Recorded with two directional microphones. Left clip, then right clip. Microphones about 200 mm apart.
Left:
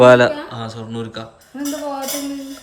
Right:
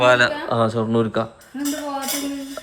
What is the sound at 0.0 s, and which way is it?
Speech, 55° left (ahead or behind).